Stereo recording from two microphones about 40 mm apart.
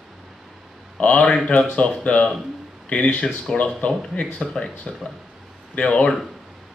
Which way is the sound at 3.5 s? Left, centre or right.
Left.